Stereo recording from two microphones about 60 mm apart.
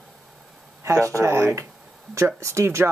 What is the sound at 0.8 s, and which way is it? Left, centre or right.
Speech, right.